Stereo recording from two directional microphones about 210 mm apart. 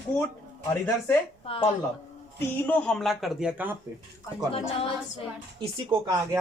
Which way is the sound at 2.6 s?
5° left (ahead or behind).